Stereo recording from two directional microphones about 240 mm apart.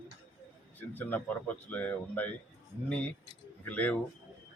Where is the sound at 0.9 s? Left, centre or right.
Centre.